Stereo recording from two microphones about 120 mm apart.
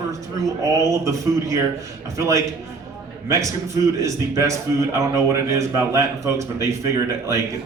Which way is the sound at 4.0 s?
25° right (ahead or behind).